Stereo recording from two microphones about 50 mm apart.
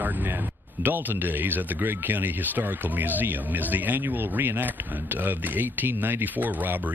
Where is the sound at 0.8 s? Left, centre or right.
Right.